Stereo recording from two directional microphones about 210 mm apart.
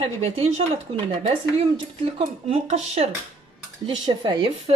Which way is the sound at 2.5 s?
30° right (ahead or behind).